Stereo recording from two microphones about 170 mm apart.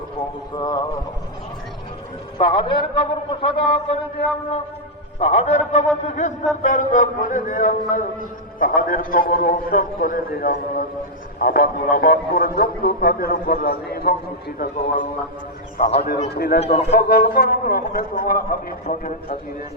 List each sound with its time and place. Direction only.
0.5 s a man's voice: 25° left (ahead or behind)
2.5 s a man's voice: 30° left (ahead or behind)
5.2 s a man's voice: 40° left (ahead or behind); by 14.8 s 60° left (ahead or behind)
15.8 s a man's voice: 65° left (ahead or behind)
16.6 s a man's voice: 40° left (ahead or behind)
16.9 s a man's voice: 70° left (ahead or behind); by 19.0 s 50° left (ahead or behind)